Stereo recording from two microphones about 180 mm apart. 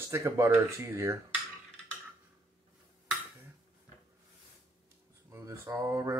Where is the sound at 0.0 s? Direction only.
15° right (ahead or behind).